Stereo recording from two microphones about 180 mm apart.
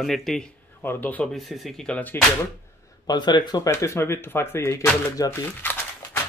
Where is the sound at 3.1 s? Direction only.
25° left (ahead or behind).